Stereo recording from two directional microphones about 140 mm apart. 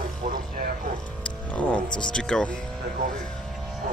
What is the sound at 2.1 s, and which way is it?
Speech, 5° left (ahead or behind).